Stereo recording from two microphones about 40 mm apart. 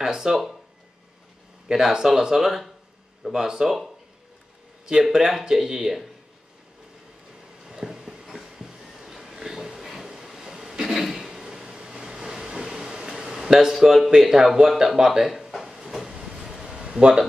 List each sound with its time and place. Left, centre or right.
0.0 s speech: centre
1.7 s speech: centre
5.1 s speech: centre
7.6 s a sound: centre
14.2 s speech: centre
14.8 s a sound: centre